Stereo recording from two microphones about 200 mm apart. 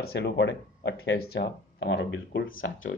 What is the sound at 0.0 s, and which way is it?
Speech, 55° left (ahead or behind).